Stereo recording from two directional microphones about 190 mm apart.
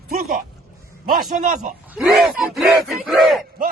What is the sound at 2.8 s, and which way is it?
Speech, centre (ahead or behind).